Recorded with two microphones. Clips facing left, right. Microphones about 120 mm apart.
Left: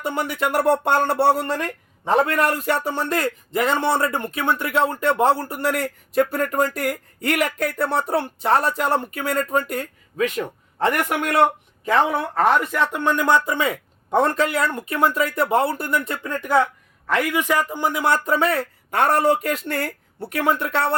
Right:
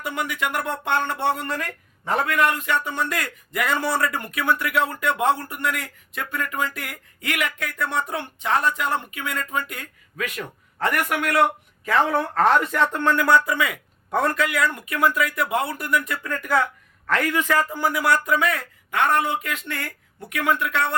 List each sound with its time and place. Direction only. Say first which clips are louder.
0.0 s a man's voice: left 4 dB; 30° left (ahead or behind)
10.2 s speech: left 7 dB; 25° left (ahead or behind)
17.1 s a man's voice: left 1 dB; 15° left (ahead or behind); by 20.9 s 35° left (ahead or behind)